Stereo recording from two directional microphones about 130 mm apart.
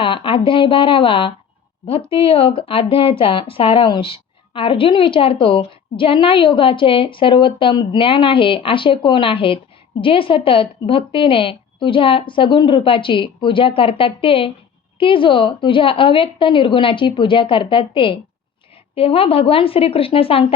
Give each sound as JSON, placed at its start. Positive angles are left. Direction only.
{"t": 0.0, "sound": "a woman's voice", "side_deg": 40}